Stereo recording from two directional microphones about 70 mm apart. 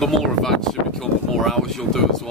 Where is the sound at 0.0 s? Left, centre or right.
Centre.